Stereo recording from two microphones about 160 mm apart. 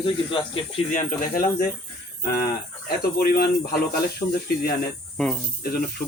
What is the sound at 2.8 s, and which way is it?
Speech, 75° left (ahead or behind).